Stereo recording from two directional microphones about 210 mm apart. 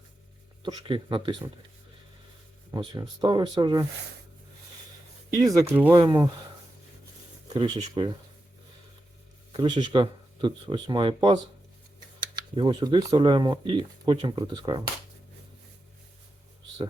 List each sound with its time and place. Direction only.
0.6 s speech: 25° right (ahead or behind)
2.7 s speech: 20° right (ahead or behind)
5.4 s speech: 15° right (ahead or behind)
7.8 s speech: 25° right (ahead or behind)
9.5 s speech: 20° right (ahead or behind)
12.4 s speech: 20° right (ahead or behind)